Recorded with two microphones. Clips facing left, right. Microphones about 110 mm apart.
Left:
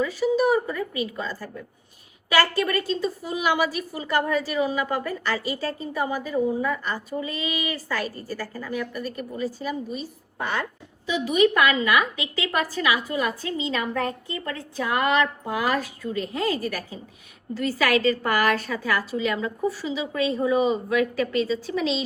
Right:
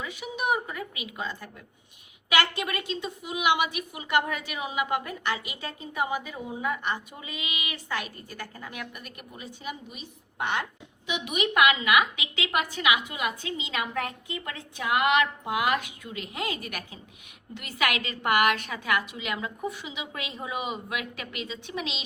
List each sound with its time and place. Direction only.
0.0 s a woman's voice: 20° right (ahead or behind)